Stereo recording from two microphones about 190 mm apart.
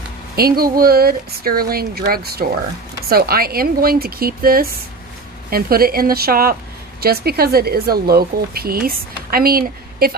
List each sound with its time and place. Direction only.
0.4 s speech: 55° right (ahead or behind)